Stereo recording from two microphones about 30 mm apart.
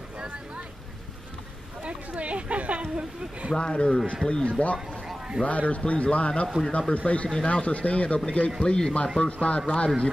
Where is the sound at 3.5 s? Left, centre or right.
Left.